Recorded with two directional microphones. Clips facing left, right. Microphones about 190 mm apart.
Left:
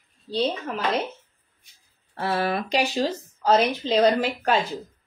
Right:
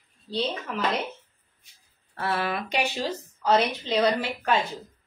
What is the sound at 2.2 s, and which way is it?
Speech, 25° left (ahead or behind).